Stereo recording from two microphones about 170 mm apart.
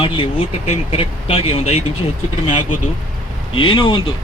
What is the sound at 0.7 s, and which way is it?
Speech, 35° left (ahead or behind).